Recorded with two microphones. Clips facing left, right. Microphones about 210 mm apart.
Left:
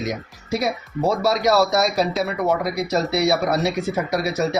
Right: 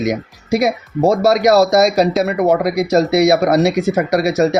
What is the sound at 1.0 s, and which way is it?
Speech, 45° right (ahead or behind).